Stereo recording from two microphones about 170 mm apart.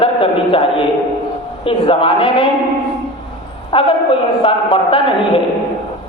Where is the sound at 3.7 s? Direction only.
30° left (ahead or behind).